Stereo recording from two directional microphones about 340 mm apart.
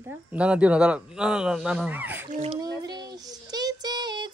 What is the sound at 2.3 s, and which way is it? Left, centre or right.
Child singing, centre.